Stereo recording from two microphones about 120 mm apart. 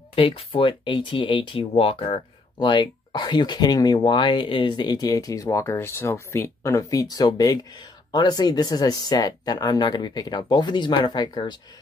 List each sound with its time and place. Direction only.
0.1 s speech: 50° left (ahead or behind)